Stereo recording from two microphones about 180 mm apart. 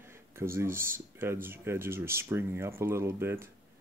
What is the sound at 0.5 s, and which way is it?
Speech, 15° right (ahead or behind).